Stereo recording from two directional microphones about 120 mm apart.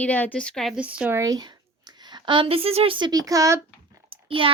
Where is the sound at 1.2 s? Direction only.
30° right (ahead or behind).